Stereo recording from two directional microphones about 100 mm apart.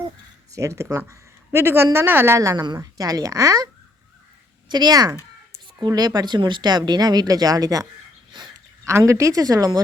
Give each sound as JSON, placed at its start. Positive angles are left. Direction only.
{"t": 0.5, "sound": "speech", "side_deg": -30}
{"t": 4.7, "sound": "speech", "side_deg": -45}
{"t": 8.8, "sound": "speech", "side_deg": -30}